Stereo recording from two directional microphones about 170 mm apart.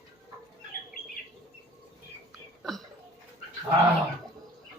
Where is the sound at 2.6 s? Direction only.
Centre (ahead or behind).